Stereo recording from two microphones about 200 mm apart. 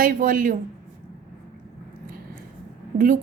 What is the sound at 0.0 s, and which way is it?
Speech, 45° right (ahead or behind).